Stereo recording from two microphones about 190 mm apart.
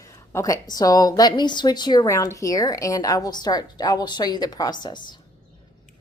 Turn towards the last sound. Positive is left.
turn(degrees=25)  # may be behind; listen again after turning